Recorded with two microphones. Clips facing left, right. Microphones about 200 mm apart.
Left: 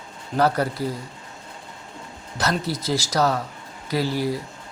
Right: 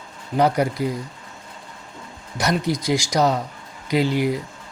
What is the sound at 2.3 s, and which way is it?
Speech, 15° right (ahead or behind).